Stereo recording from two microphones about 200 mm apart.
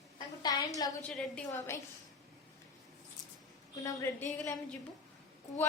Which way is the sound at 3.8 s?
10° left (ahead or behind).